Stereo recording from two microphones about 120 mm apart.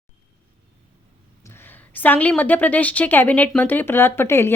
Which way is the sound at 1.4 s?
20° left (ahead or behind).